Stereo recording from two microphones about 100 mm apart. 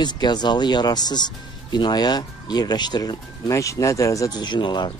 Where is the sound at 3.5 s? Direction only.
30° left (ahead or behind).